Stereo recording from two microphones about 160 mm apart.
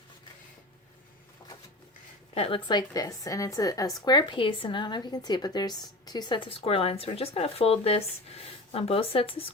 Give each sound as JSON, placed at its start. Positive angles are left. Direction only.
{"t": 2.3, "sound": "a woman's voice", "side_deg": 35}